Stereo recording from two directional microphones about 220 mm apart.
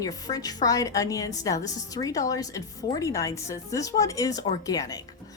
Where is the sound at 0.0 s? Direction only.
15° left (ahead or behind).